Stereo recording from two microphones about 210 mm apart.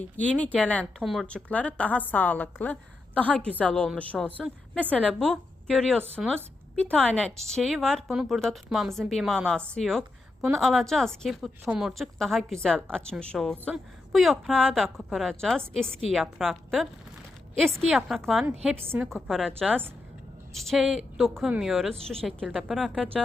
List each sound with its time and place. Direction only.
0.3 s a woman's voice: 5° left (ahead or behind)